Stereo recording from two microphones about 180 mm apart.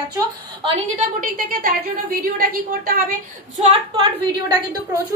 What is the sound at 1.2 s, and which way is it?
A woman's voice, 55° right (ahead or behind).